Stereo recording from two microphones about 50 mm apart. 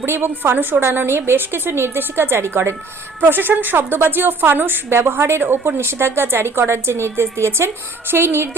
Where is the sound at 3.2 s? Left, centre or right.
Right.